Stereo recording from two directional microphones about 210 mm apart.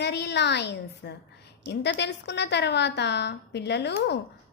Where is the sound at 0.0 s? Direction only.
55° left (ahead or behind).